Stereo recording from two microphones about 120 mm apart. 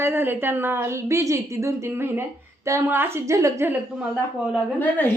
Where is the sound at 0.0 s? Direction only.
20° right (ahead or behind).